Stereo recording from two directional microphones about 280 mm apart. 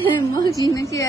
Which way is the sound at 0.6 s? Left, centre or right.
Centre.